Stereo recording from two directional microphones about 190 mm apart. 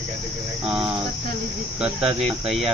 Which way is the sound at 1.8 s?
5° right (ahead or behind).